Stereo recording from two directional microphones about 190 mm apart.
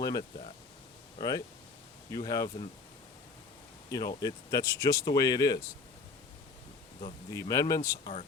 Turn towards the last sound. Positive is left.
turn(degrees=15)  # may be behind; listen again after turning